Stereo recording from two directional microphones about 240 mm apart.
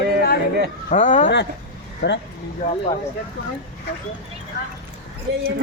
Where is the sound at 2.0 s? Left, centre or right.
Left.